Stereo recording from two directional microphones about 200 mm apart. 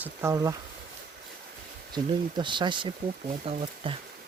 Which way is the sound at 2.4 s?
25° right (ahead or behind).